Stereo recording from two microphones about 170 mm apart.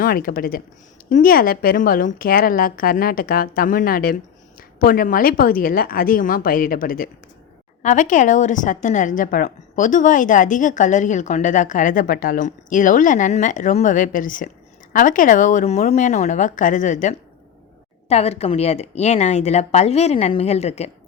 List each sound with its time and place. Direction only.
0.0 s a woman's voice: 55° left (ahead or behind)
7.8 s a woman's voice: 45° left (ahead or behind)